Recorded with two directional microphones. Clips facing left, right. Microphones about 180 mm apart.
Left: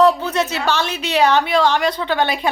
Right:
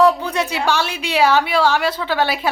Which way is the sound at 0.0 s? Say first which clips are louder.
Left 1 dB; 10° right (ahead or behind).